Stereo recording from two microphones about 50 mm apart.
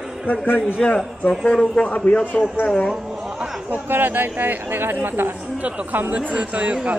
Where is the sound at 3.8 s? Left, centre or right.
Right.